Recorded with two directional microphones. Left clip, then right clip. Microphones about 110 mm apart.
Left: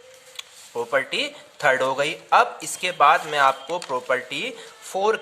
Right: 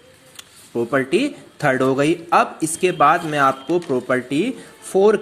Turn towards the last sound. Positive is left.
turn(degrees=0)  # may be behind; listen again after turning